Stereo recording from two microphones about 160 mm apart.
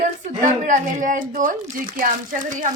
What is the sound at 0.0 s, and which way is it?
Speech, 50° right (ahead or behind).